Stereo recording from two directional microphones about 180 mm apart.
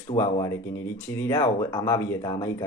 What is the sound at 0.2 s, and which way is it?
Speech, 15° left (ahead or behind).